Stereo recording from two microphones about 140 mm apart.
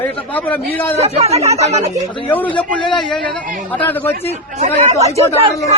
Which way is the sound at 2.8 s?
35° left (ahead or behind).